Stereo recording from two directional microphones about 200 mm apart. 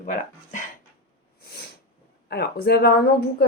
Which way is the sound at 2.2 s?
50° left (ahead or behind).